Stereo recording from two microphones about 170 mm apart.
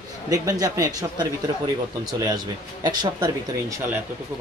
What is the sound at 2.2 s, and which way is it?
Speech, 25° right (ahead or behind).